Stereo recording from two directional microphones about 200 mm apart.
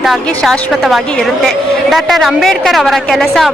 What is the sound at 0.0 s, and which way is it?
A woman's voice, centre (ahead or behind).